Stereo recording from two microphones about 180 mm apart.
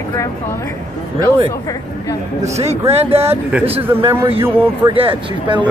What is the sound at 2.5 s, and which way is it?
Speech, 35° right (ahead or behind).